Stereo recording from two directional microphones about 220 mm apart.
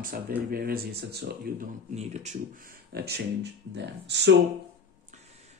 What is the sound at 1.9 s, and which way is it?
Speech, 30° right (ahead or behind).